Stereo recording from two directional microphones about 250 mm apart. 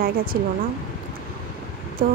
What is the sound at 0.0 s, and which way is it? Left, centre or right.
Speech, right.